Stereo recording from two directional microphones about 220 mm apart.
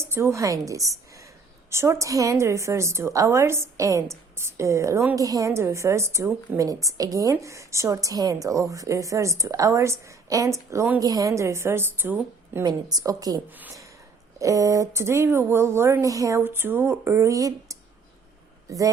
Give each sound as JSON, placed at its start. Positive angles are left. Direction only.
{"t": 0.1, "sound": "a woman's voice", "side_deg": -10}